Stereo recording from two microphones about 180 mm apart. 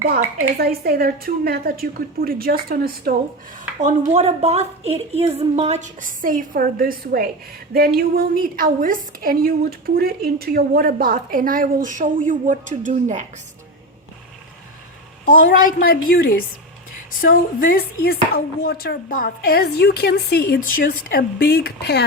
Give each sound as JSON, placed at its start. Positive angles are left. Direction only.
{"t": 0.0, "sound": "a woman's voice", "side_deg": -55}
{"t": 3.8, "sound": "a woman's voice", "side_deg": -40}
{"t": 15.3, "sound": "a woman's voice", "side_deg": 50}